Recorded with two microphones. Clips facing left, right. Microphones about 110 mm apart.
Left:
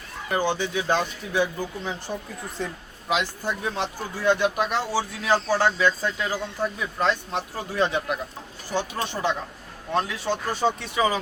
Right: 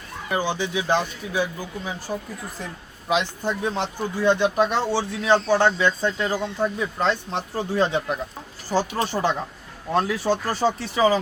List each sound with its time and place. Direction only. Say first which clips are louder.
0.3 s speech: even; 15° right (ahead or behind)
3.1 s speech: right 2 dB; 25° right (ahead or behind)
10.2 s speech: right 3 dB; 35° right (ahead or behind)